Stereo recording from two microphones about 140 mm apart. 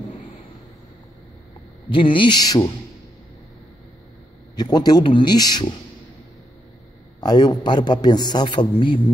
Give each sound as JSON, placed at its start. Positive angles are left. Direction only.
{"t": 1.9, "sound": "a man's voice", "side_deg": 35}
{"t": 4.6, "sound": "a man's voice", "side_deg": 30}
{"t": 7.2, "sound": "a man's voice", "side_deg": 30}